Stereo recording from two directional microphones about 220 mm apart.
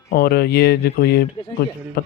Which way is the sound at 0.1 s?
45° left (ahead or behind).